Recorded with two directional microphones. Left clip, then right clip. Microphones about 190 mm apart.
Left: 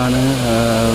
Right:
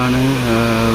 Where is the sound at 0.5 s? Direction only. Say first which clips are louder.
Left 1 dB; centre (ahead or behind).